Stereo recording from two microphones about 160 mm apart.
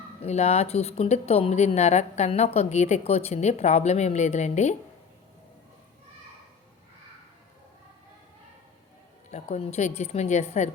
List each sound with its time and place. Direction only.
0.2 s speech: 45° left (ahead or behind)
9.3 s speech: 45° left (ahead or behind)